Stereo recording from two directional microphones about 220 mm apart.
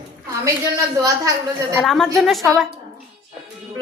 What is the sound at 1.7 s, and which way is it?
Speech, centre (ahead or behind).